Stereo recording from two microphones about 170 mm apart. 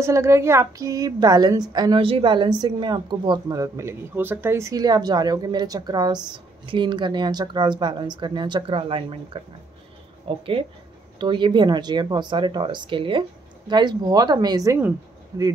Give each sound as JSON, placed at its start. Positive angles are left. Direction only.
{"t": 0.0, "sound": "a woman's voice", "side_deg": -15}